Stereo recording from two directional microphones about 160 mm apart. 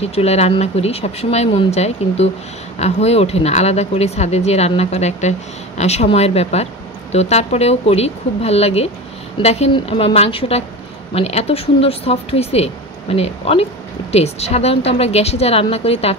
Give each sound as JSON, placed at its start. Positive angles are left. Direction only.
{"t": 0.0, "sound": "speech", "side_deg": 40}